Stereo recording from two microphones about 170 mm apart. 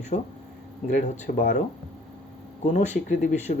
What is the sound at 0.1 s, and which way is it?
Speech, 40° left (ahead or behind).